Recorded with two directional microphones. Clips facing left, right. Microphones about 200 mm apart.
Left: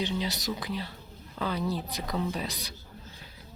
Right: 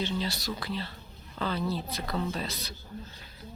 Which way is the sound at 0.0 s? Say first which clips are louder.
Left 1 dB; 15° left (ahead or behind).